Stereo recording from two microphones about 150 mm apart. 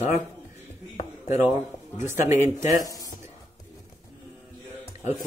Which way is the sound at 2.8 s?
25° left (ahead or behind).